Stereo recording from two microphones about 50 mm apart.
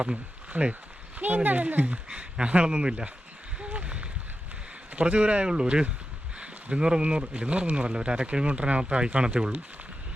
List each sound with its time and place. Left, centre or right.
0.0 s speech: right
3.6 s a sound: right
4.9 s speech: right